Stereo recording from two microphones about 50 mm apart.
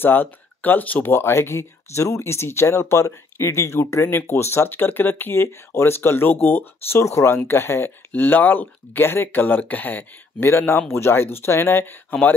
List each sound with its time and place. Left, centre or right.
0.0 s speech: left
1.0 s speech: left
4.1 s speech: left
7.1 s speech: left
8.1 s speech: left
10.4 s speech: left
12.1 s speech: left